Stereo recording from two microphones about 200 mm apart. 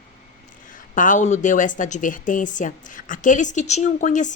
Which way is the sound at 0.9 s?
40° left (ahead or behind).